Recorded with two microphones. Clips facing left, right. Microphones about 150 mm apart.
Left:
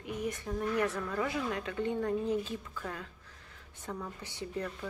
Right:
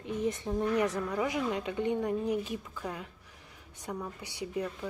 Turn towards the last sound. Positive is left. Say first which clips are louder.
# right 3 dB
turn(degrees=-15)  # may be behind; listen again after turning